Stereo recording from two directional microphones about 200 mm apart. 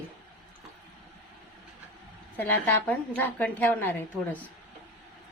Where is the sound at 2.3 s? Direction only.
10° left (ahead or behind).